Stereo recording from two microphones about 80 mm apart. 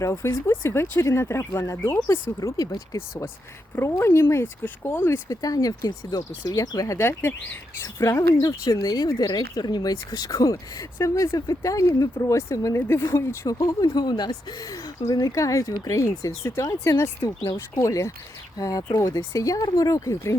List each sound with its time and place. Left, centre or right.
0.0 s speech: left
5.3 s speech: left
13.6 s speech: left
15.4 s speech: left